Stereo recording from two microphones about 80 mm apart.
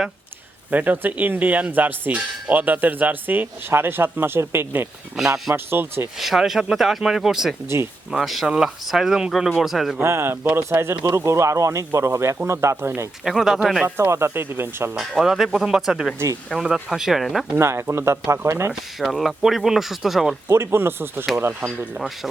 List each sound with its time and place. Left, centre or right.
0.7 s speech: right
6.1 s speech: centre
10.0 s speech: right
13.2 s speech: centre
13.8 s speech: right
14.9 s speech: centre
16.1 s speech: right
16.5 s speech: centre
17.6 s speech: right
18.7 s speech: centre
20.5 s speech: right
21.9 s speech: centre